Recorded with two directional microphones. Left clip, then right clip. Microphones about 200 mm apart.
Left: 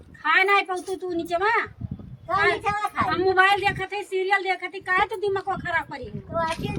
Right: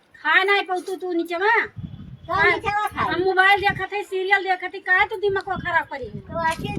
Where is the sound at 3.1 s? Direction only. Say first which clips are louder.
Right 2 dB; 30° left (ahead or behind).